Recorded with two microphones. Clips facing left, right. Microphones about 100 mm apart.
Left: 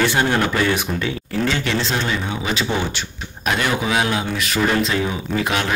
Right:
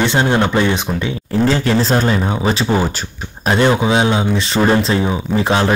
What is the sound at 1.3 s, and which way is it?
Speech, 35° right (ahead or behind).